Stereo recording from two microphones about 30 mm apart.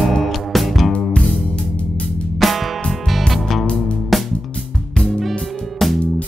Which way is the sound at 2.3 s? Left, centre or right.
Centre.